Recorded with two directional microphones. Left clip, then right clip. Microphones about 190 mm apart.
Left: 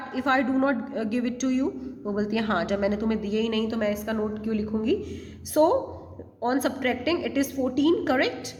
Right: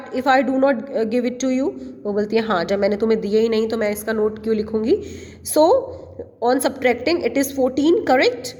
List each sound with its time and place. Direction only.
0.1 s a woman's voice: 30° right (ahead or behind)